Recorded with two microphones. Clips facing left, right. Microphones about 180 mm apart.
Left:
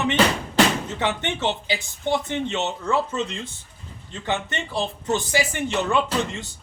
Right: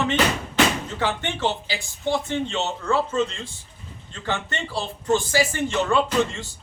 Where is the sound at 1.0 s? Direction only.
20° left (ahead or behind).